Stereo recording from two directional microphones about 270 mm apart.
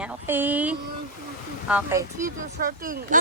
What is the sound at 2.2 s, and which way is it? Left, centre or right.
Speech, right.